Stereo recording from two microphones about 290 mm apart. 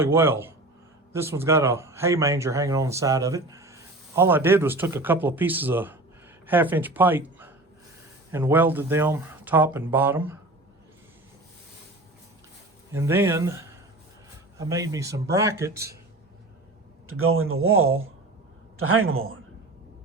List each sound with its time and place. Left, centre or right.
0.0 s speech: centre
12.9 s speech: centre
17.1 s speech: right